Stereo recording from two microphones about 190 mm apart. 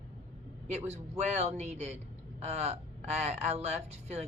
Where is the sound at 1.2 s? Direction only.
35° right (ahead or behind).